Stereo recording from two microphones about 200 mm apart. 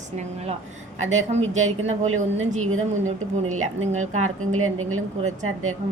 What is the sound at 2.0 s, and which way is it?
Speech, 90° right.